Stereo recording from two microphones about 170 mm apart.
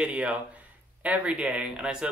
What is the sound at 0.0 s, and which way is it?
Speech, 5° right (ahead or behind).